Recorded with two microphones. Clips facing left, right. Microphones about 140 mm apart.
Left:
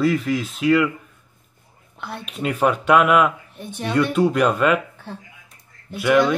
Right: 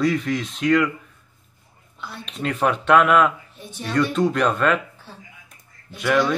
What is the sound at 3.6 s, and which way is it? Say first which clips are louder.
Speech: left 5 dB; 60° left (ahead or behind).